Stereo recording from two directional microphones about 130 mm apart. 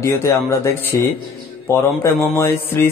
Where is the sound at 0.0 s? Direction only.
20° left (ahead or behind).